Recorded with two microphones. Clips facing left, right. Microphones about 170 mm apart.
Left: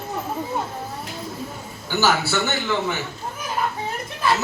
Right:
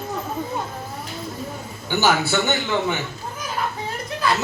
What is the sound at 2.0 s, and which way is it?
Speech, 15° right (ahead or behind).